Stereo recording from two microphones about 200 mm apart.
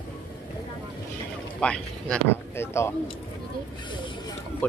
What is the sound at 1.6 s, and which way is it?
Speech, 5° left (ahead or behind).